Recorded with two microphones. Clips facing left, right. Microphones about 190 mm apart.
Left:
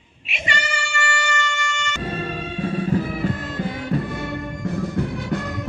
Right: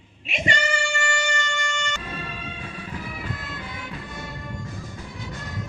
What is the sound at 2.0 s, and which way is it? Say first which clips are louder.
Music: left 8 dB; 40° left (ahead or behind).